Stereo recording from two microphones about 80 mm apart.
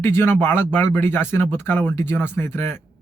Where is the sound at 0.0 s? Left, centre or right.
Left.